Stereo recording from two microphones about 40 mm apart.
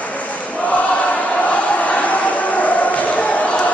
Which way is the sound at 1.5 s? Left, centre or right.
Left.